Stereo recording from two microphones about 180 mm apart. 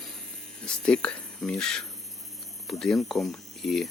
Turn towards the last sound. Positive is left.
turn(degrees=0)  # may be behind; listen again after turning